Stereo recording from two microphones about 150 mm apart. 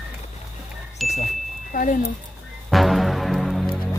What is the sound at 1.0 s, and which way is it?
Speech, 45° left (ahead or behind).